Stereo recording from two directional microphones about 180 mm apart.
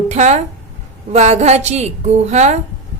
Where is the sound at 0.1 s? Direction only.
40° right (ahead or behind).